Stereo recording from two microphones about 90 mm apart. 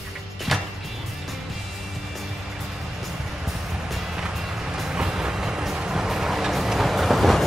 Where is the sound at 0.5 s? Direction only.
Centre (ahead or behind).